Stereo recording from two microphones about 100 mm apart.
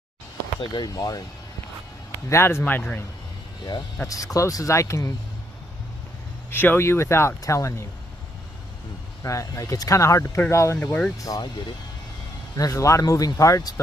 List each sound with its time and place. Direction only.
0.6 s speech: 45° left (ahead or behind)
2.2 s speech: 25° left (ahead or behind)
4.1 s speech: 35° left (ahead or behind)
6.5 s speech: 20° left (ahead or behind)
9.2 s speech: 35° left (ahead or behind)
10.8 s speech: 10° left (ahead or behind)
11.2 s speech: 40° left (ahead or behind)
12.5 s speech: 35° left (ahead or behind)